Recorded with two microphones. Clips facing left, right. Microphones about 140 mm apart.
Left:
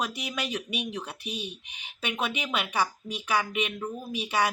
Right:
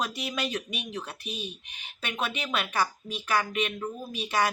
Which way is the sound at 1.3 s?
70° left (ahead or behind).